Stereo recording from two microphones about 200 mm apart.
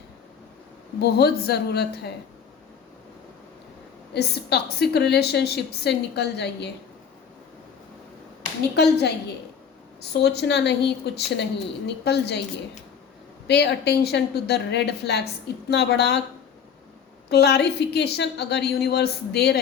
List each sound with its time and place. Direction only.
1.0 s a woman's voice: 50° left (ahead or behind)
4.1 s a woman's voice: 55° left (ahead or behind)
8.7 s a woman's voice: 55° left (ahead or behind)
10.1 s a woman's voice: 55° left (ahead or behind)
13.5 s a woman's voice: 55° left (ahead or behind)
17.2 s a woman's voice: 55° left (ahead or behind)